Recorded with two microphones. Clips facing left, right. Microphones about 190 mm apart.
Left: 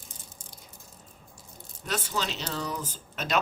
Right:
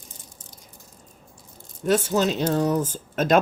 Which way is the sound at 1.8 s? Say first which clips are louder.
Right 11 dB; 50° right (ahead or behind).